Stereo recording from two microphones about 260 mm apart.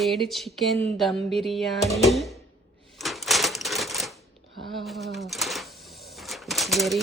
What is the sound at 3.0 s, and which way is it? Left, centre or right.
Typewriter, centre.